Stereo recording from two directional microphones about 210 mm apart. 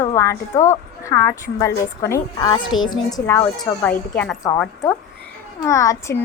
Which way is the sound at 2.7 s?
70° left (ahead or behind).